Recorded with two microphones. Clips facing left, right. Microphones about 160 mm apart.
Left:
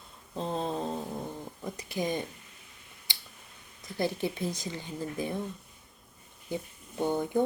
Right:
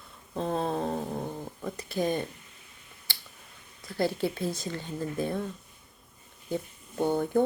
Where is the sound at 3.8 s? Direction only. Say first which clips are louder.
Right 2 dB; 20° left (ahead or behind).